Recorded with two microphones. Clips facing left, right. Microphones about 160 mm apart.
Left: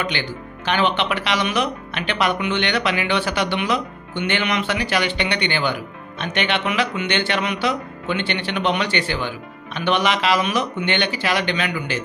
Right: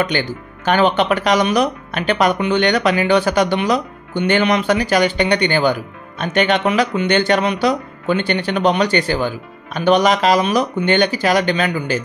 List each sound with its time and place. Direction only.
0.0 s speech: 45° right (ahead or behind)